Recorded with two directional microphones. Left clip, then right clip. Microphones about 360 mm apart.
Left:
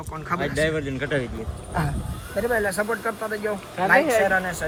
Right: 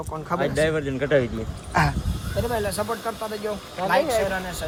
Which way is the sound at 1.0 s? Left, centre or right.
Right.